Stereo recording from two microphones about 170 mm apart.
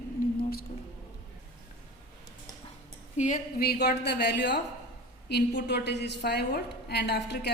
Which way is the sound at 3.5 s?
70° left (ahead or behind).